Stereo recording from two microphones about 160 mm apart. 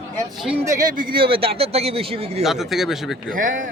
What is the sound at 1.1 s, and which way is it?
A man's voice, 35° right (ahead or behind).